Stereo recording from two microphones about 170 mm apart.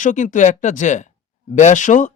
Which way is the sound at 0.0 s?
50° left (ahead or behind).